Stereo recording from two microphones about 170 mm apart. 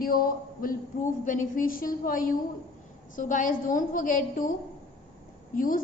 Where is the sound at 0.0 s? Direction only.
55° left (ahead or behind).